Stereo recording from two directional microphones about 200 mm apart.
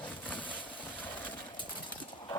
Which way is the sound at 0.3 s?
25° left (ahead or behind).